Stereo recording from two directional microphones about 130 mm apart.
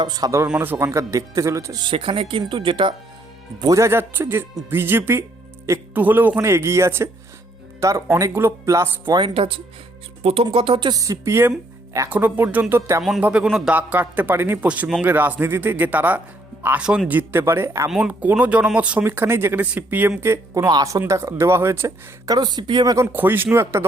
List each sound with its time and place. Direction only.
0.0 s speech: 30° right (ahead or behind)
0.4 s speech: 10° right (ahead or behind)
1.8 s speech: 40° right (ahead or behind)
3.6 s speech: 25° right (ahead or behind)
9.2 s speech: 45° right (ahead or behind); by 13.0 s 15° right (ahead or behind)
13.0 s speech: centre (ahead or behind); by 23.0 s 30° right (ahead or behind)
23.1 s speech: 15° right (ahead or behind)